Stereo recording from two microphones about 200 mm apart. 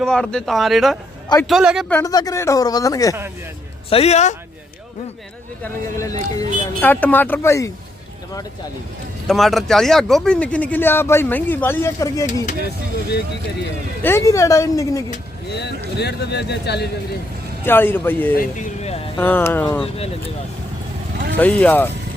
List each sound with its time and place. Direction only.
0.0 s speech: 5° left (ahead or behind)
1.9 s speech: 15° left (ahead or behind)
3.8 s a man's voice: 30° left (ahead or behind)
5.6 s speech: 15° left (ahead or behind)
9.2 s speech: centre (ahead or behind); by 12.2 s 15° left (ahead or behind)
13.1 s speech: 55° left (ahead or behind)
14.0 s speech: 15° left (ahead or behind)
15.5 s speech: 55° left (ahead or behind)
17.7 s speech: 10° left (ahead or behind)
18.3 s a sound: 40° left (ahead or behind)
19.2 s speech: 10° left (ahead or behind)
21.3 s speech: 10° left (ahead or behind)